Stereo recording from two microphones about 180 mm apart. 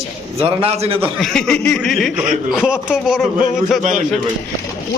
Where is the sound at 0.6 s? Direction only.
30° right (ahead or behind).